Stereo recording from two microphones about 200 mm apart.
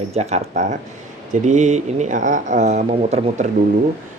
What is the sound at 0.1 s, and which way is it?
Speech, 35° right (ahead or behind).